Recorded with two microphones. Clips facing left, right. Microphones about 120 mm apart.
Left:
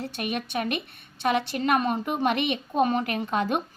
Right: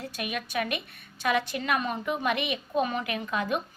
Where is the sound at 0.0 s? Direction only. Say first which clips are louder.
Left 4 dB; 30° left (ahead or behind).